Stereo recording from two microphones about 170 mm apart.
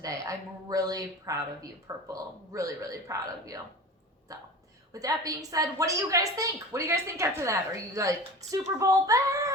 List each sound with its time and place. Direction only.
0.0 s a woman's voice: 20° right (ahead or behind)
4.9 s a woman's voice: 20° right (ahead or behind)